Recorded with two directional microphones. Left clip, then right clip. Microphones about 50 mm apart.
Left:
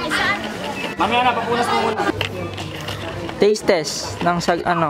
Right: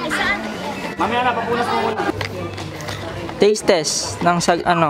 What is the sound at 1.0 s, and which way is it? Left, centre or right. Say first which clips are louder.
Speech: left 1 dB; left.